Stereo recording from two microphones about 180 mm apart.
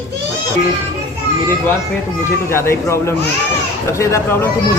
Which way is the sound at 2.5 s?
15° left (ahead or behind).